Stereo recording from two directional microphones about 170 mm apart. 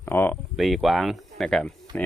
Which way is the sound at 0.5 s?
Centre (ahead or behind).